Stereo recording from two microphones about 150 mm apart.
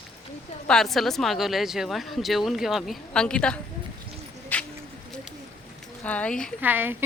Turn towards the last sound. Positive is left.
turn(degrees=-15)  # may be behind; listen again after turning